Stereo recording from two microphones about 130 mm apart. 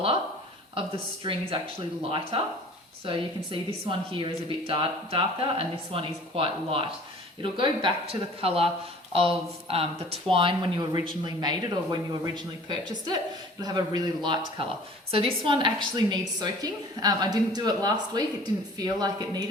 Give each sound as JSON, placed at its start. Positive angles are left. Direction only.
{"t": 0.8, "sound": "a woman's voice", "side_deg": -45}